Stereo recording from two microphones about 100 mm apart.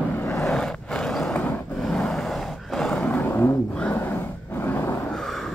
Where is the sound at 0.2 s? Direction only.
20° left (ahead or behind).